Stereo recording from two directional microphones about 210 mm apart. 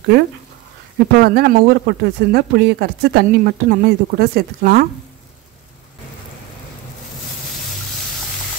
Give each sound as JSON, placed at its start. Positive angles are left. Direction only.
{"t": 0.9, "sound": "speech", "side_deg": -50}